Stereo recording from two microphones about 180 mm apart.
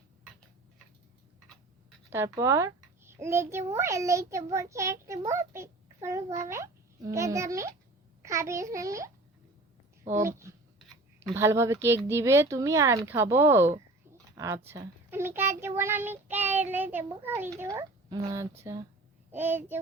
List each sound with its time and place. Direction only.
2.1 s a child's voice: 15° right (ahead or behind)
10.1 s a child's voice: 15° right (ahead or behind)